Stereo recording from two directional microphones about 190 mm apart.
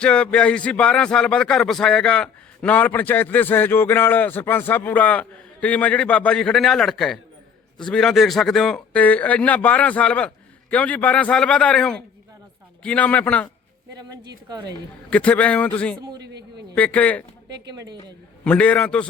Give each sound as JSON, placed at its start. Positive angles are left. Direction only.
{"t": 0.0, "sound": "speech", "side_deg": 5}
{"t": 14.0, "sound": "speech", "side_deg": -20}
{"t": 15.1, "sound": "speech", "side_deg": 5}
{"t": 16.1, "sound": "speech", "side_deg": -60}
{"t": 16.7, "sound": "speech", "side_deg": 5}
{"t": 18.4, "sound": "speech", "side_deg": 5}